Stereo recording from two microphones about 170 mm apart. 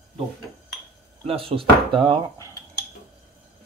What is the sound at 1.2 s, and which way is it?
Speech, 35° right (ahead or behind).